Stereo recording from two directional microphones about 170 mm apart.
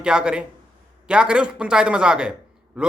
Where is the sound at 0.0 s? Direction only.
5° right (ahead or behind).